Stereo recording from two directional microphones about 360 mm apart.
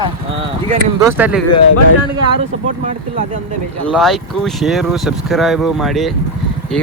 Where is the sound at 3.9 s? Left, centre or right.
Centre.